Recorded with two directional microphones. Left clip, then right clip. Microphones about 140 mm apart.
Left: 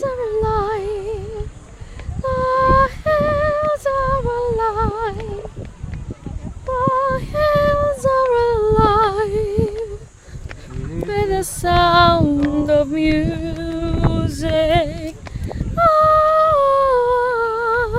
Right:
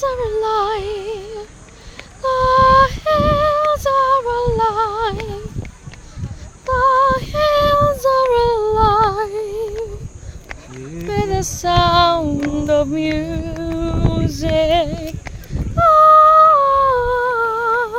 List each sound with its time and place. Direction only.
0.0 s a sound: 15° left (ahead or behind)
2.2 s a sound: 10° left (ahead or behind)
6.7 s female singing: 10° left (ahead or behind); by 8.6 s 30° left (ahead or behind)
8.6 s humming: 50° left (ahead or behind)
11.1 s female singing: 35° left (ahead or behind)
11.6 s music: 30° left (ahead or behind); by 13.9 s 50° left (ahead or behind)
14.1 s music: 35° left (ahead or behind)
15.8 s humming: 35° left (ahead or behind)